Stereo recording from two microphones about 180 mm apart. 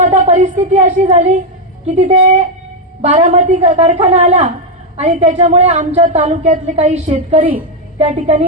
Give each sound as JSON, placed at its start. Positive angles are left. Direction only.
{"t": 0.0, "sound": "a woman's voice", "side_deg": -40}